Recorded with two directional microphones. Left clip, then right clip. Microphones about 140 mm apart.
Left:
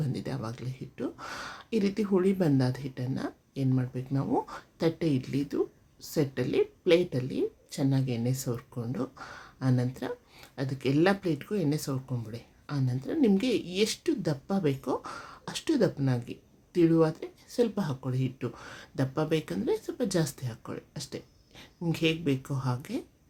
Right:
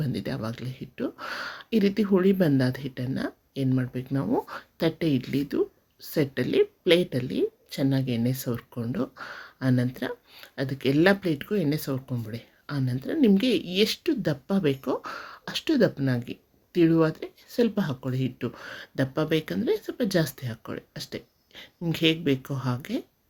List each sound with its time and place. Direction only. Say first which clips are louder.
0.0 s speech: right 4 dB; 15° right (ahead or behind)